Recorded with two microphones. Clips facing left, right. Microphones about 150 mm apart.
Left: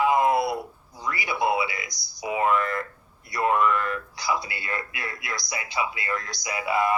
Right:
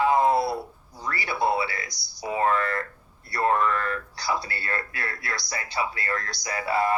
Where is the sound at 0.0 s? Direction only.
35° right (ahead or behind).